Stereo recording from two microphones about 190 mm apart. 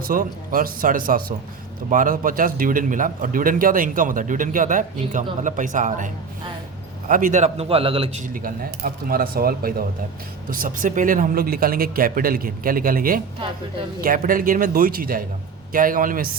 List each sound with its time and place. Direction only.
0.0 s a man's voice: 45° right (ahead or behind)
7.1 s a man's voice: 45° right (ahead or behind)
8.2 s a man's voice: 45° right (ahead or behind)